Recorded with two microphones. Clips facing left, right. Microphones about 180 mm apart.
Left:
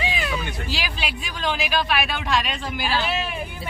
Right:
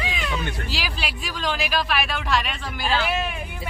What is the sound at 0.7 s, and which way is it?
Speech, centre (ahead or behind).